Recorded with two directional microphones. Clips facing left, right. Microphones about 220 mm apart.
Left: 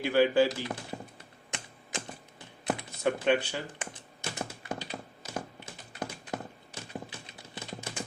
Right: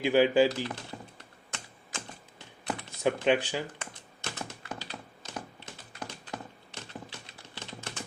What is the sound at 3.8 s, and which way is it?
Typing, 15° left (ahead or behind).